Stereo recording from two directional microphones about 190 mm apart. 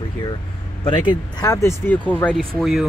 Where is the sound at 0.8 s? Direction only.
25° left (ahead or behind); by 2.9 s centre (ahead or behind).